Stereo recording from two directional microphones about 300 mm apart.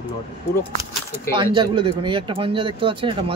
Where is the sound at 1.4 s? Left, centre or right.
Centre.